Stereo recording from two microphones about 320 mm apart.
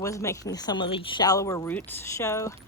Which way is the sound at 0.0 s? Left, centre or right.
Centre.